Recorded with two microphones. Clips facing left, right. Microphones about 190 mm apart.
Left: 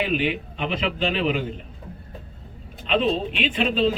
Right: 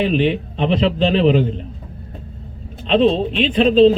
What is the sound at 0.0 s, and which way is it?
Speech, 35° right (ahead or behind).